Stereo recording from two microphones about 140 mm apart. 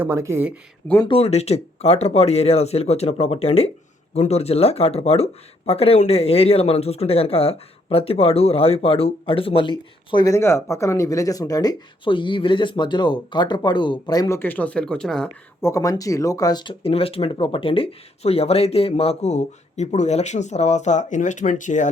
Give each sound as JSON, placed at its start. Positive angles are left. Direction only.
{"t": 0.0, "sound": "speech", "side_deg": -20}
{"t": 1.0, "sound": "speech", "side_deg": 45}
{"t": 10.2, "sound": "speech", "side_deg": 20}
{"t": 15.6, "sound": "speech", "side_deg": 25}